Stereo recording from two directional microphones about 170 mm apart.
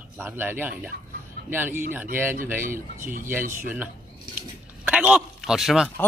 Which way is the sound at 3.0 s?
55° right (ahead or behind).